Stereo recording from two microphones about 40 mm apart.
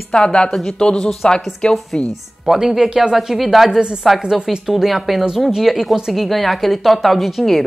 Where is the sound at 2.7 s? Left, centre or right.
Centre.